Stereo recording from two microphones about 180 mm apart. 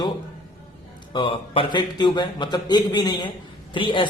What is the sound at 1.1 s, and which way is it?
A man's voice, 25° left (ahead or behind).